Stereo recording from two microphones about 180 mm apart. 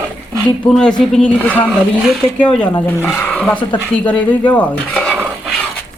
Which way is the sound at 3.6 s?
25° left (ahead or behind).